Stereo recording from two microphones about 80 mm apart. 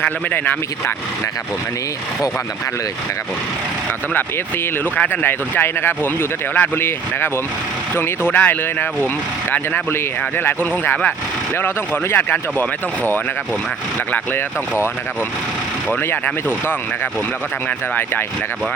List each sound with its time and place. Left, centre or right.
0.0 s speech: left
4.9 s speech: left
12.1 s speech: left
14.1 s speech: left